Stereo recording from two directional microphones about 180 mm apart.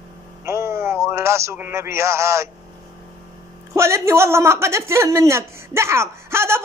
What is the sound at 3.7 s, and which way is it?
A woman's voice, 15° right (ahead or behind).